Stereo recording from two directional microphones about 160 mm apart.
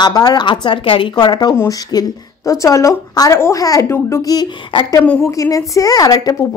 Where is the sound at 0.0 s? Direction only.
25° left (ahead or behind).